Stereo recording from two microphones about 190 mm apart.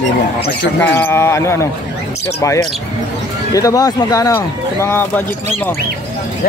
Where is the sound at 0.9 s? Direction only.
10° left (ahead or behind).